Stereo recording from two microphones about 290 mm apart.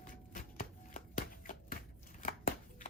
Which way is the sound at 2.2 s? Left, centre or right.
Left.